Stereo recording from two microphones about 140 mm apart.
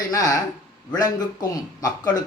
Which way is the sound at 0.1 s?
25° left (ahead or behind).